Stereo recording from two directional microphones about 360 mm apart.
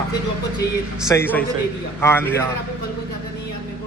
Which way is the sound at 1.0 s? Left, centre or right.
Centre.